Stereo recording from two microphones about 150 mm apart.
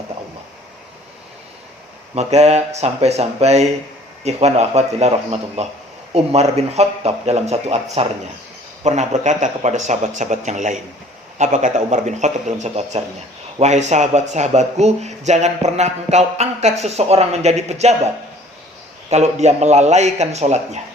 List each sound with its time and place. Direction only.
2.1 s speech: 45° right (ahead or behind)
19.1 s speech: 50° right (ahead or behind)